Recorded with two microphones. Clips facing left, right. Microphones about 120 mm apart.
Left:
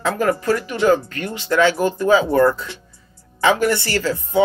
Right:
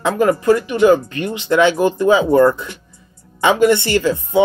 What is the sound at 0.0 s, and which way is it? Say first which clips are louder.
Speech: right 4 dB; 20° right (ahead or behind).